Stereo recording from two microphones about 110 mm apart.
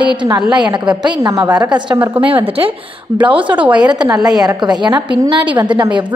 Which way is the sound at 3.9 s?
40° right (ahead or behind).